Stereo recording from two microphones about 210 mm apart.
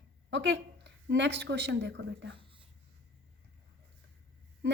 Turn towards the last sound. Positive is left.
turn(degrees=-55)  # may be behind; listen again after turning